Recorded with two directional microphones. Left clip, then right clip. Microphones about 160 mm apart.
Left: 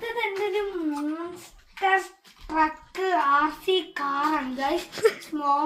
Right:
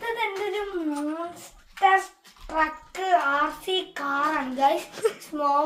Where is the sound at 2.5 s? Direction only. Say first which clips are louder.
Left 1 dB; 40° right (ahead or behind).